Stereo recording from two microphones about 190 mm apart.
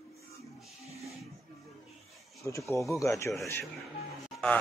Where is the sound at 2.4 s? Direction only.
15° left (ahead or behind).